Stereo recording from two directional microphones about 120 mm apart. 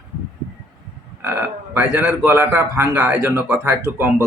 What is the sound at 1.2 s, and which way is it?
Speech, 20° right (ahead or behind).